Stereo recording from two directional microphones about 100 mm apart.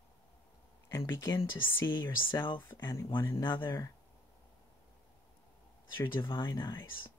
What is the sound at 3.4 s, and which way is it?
Speech, 50° left (ahead or behind).